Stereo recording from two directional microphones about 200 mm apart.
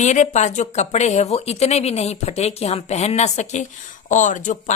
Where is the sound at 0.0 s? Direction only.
35° left (ahead or behind).